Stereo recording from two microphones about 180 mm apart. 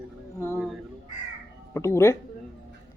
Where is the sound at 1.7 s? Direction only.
15° left (ahead or behind).